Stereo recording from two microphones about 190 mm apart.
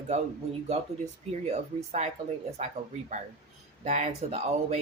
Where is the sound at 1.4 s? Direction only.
35° right (ahead or behind).